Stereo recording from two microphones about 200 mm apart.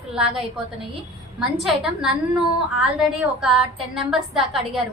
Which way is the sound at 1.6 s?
5° right (ahead or behind).